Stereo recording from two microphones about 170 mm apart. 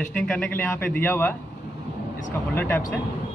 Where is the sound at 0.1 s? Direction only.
5° left (ahead or behind).